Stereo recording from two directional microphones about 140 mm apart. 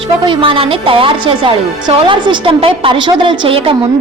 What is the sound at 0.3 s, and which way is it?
A woman's voice, 40° right (ahead or behind).